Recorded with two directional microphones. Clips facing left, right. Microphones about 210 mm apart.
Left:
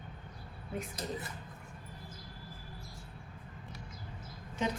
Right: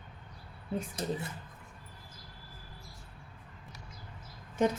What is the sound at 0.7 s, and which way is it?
Speech, 25° right (ahead or behind).